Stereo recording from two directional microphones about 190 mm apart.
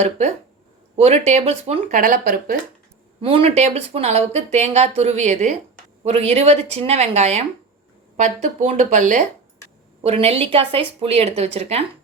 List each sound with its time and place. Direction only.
0.9 s speech: 35° right (ahead or behind)
1.9 s speech: 45° right (ahead or behind)
3.2 s speech: 30° right (ahead or behind)